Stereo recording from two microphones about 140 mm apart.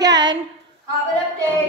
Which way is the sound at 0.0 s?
35° right (ahead or behind).